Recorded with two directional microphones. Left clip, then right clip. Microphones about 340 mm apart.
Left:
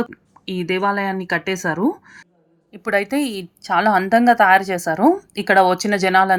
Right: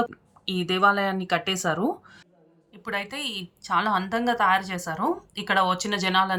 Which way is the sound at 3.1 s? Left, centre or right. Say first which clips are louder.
Left 9 dB; centre.